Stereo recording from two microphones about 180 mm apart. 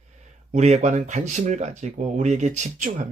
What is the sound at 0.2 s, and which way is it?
Speech, 40° right (ahead or behind).